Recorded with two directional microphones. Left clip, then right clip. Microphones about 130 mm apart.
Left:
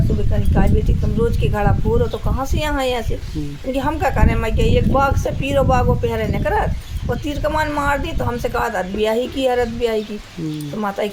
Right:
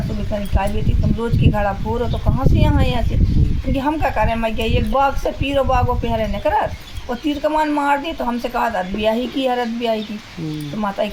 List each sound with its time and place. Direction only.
1.2 s a woman's voice: 40° left (ahead or behind)